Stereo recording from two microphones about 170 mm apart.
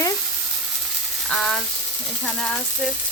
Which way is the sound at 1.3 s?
5° left (ahead or behind).